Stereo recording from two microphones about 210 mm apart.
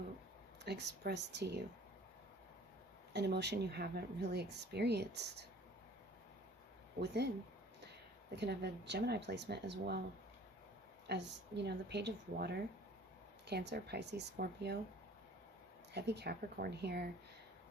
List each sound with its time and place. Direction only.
0.6 s speech: 55° right (ahead or behind)
3.1 s speech: 55° right (ahead or behind)
7.0 s speech: 55° right (ahead or behind)
8.4 s speech: 50° right (ahead or behind)
11.0 s speech: 50° right (ahead or behind)
15.9 s speech: 55° right (ahead or behind)